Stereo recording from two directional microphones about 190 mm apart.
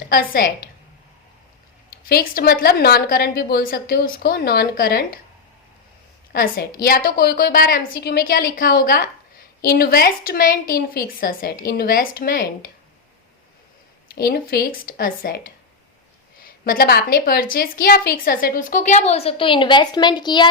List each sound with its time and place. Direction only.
0.1 s a woman's voice: 50° left (ahead or behind)
2.0 s a woman's voice: 55° left (ahead or behind)
6.3 s a woman's voice: 50° left (ahead or behind)
14.1 s a woman's voice: 55° left (ahead or behind); by 20.5 s 25° left (ahead or behind)